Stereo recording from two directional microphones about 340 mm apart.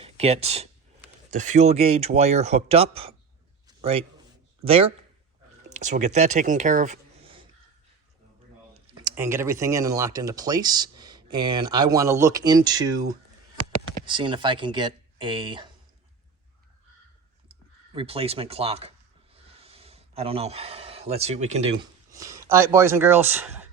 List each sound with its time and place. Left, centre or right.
0.0 s a man's voice: centre
9.0 s speech: centre
17.9 s speech: centre